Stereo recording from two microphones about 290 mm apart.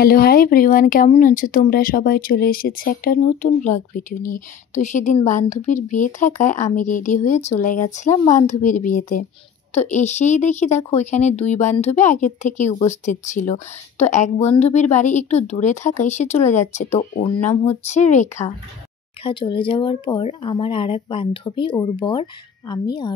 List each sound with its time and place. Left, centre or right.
0.0 s speech: left; by 23.1 s centre